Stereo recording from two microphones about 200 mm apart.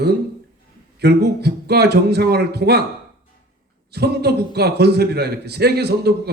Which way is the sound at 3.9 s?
55° right (ahead or behind).